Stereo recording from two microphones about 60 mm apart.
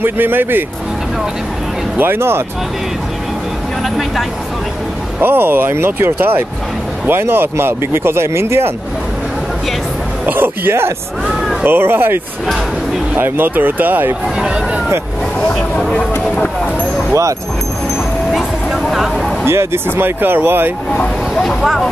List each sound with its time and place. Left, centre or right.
0.0 s speech: right
2.0 s speech: right
5.2 s speech: right
10.2 s speech: right
15.4 s speech: centre
17.1 s speech: right
18.3 s a sound: centre
19.4 s speech: right